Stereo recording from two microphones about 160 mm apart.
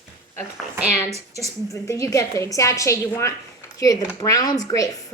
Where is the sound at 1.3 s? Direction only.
20° left (ahead or behind).